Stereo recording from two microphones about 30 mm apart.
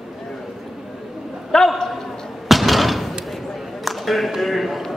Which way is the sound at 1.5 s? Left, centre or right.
Left.